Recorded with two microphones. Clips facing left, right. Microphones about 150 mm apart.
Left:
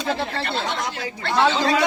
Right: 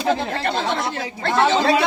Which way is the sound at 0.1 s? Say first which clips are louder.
Right 4 dB; 45° right (ahead or behind).